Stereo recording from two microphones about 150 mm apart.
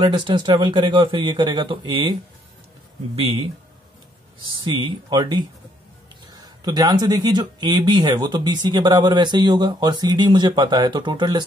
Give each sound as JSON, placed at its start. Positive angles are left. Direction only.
{"t": 0.0, "sound": "speech", "side_deg": -30}
{"t": 4.4, "sound": "speech", "side_deg": -35}